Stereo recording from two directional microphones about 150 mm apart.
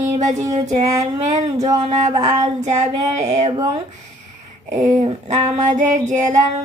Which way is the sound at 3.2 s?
45° right (ahead or behind).